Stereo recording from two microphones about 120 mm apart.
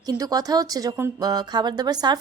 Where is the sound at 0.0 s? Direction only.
30° right (ahead or behind).